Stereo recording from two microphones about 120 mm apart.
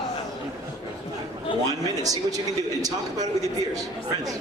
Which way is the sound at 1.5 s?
45° left (ahead or behind).